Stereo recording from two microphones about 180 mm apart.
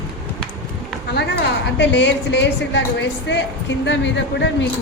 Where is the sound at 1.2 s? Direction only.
70° left (ahead or behind).